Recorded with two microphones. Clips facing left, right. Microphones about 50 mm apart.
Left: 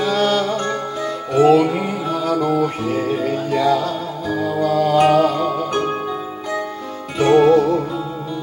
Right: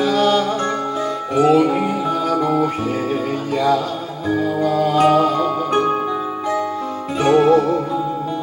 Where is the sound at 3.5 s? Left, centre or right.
Left.